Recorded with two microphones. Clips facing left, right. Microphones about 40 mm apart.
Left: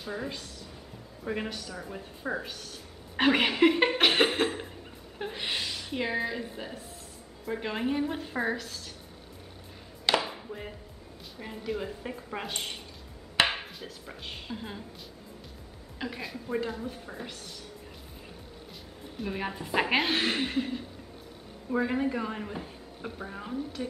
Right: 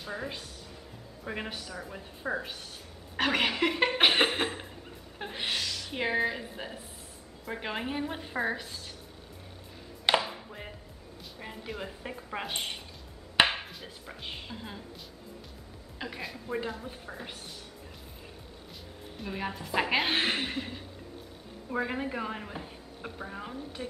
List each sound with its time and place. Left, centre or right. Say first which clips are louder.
0.0 s a woman's voice: left 2 dB; centre
0.3 s a woman's voice: left 1 dB; right
1.2 s a woman's voice: left 3 dB; centre
3.2 s speech: left 4 dB; centre
4.0 s a sound: right 2 dB; centre
5.5 s a sound: right 2 dB; centre
5.9 s a woman's voice: right 2 dB; centre
10.2 s music: left 2 dB; centre
11.5 s a woman's voice: left 6 dB; centre
13.5 s chopping: left 1 dB; centre
14.0 s speech: right 1 dB; centre
16.0 s a woman's voice: left 2 dB; centre
19.1 s speech: left 2 dB; centre
20.1 s a woman's voice: left 1 dB; centre